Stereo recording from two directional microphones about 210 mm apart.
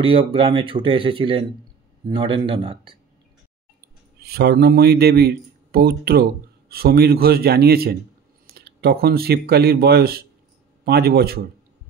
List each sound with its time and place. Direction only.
0.0 s speech: 25° right (ahead or behind)
4.2 s speech: 50° right (ahead or behind)